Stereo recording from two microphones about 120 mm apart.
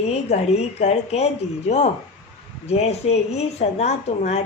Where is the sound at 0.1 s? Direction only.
65° left (ahead or behind).